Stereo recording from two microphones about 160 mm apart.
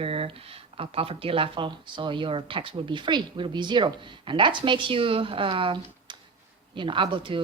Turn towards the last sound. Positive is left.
turn(degrees=-30)  # may be behind; listen again after turning